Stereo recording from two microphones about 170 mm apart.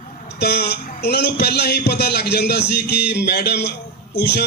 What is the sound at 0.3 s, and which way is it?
A man's voice, 70° left (ahead or behind).